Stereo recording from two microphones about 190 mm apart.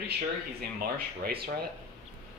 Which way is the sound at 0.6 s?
55° right (ahead or behind).